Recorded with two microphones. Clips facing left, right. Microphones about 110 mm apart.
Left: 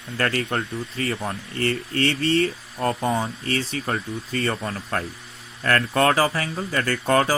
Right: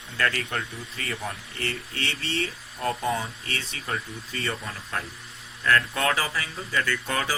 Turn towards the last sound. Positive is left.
turn(degrees=45)  # may be behind; listen again after turning